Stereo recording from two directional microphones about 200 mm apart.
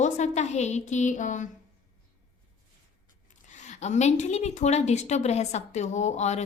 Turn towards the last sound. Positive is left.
turn(degrees=35)  # may be behind; listen again after turning